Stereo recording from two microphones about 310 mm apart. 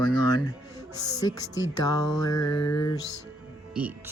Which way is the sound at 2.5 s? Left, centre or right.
Left.